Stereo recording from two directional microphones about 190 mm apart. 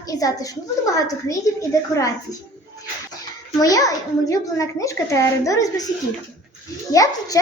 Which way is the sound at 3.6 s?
20° left (ahead or behind).